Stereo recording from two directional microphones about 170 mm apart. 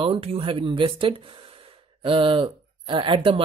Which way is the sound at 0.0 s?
35° right (ahead or behind).